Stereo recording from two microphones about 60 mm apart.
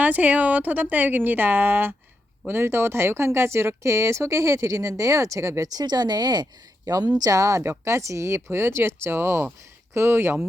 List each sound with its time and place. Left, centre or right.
0.0 s a woman's voice: right
6.8 s speech: right
7.6 s speech: right